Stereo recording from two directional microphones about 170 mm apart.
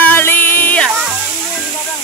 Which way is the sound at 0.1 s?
10° left (ahead or behind).